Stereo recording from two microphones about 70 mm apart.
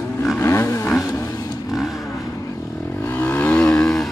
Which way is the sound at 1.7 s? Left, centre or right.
Centre.